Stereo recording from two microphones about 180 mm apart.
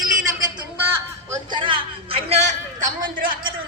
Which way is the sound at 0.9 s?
20° right (ahead or behind).